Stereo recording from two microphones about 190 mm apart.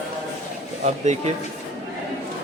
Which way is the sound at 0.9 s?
40° right (ahead or behind).